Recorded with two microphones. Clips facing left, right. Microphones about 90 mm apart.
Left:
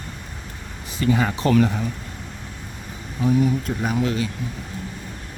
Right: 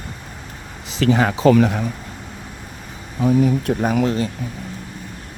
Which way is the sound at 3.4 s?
60° right (ahead or behind).